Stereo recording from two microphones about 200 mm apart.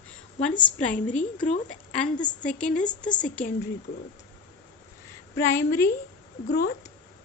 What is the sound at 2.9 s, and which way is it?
Speech, 20° left (ahead or behind).